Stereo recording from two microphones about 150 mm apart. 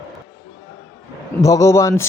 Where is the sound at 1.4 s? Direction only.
20° left (ahead or behind).